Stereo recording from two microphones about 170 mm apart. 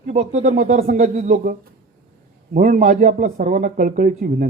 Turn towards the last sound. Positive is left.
turn(degrees=-50)  # may be behind; listen again after turning